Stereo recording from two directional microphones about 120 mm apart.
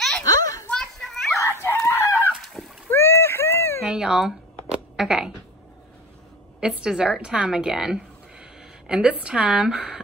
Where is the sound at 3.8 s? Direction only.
5° right (ahead or behind).